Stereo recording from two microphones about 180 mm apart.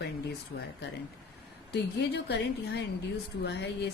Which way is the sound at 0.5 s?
75° left (ahead or behind).